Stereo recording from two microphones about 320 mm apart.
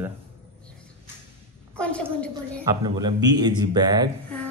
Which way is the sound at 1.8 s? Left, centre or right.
Centre.